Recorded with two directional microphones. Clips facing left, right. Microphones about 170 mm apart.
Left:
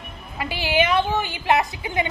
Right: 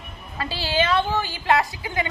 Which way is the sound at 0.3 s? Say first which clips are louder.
Left 2 dB; 15° left (ahead or behind).